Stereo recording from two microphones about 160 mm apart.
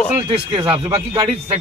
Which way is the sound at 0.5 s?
35° right (ahead or behind).